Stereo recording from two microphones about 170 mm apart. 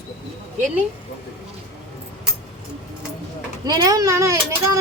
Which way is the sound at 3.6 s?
20° right (ahead or behind).